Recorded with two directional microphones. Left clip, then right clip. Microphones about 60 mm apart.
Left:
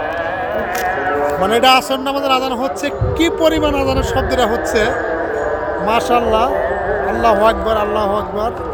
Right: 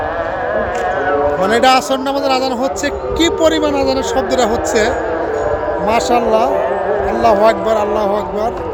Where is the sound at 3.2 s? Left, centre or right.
Centre.